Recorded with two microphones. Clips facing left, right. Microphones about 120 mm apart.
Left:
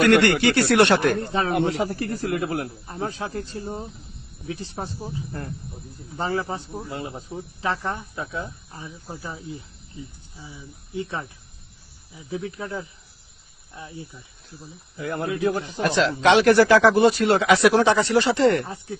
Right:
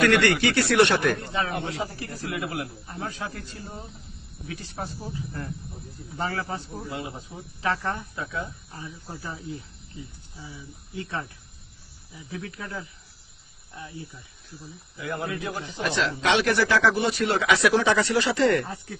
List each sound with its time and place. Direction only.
0.0 s speech: 30° left (ahead or behind)
1.8 s speech: 65° left (ahead or behind)
2.2 s speech: 40° left (ahead or behind); by 8.0 s 15° left (ahead or behind)
8.1 s speech: 30° left (ahead or behind)
14.9 s speech: 40° left (ahead or behind)